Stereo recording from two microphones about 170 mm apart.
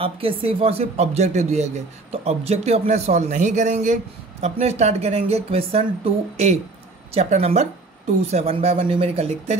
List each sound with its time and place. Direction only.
0.0 s speech: 35° right (ahead or behind)